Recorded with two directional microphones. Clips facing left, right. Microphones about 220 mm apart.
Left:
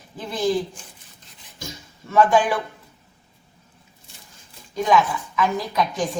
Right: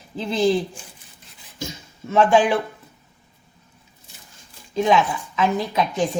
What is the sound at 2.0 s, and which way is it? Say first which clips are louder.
Speech: right 1 dB; 25° right (ahead or behind).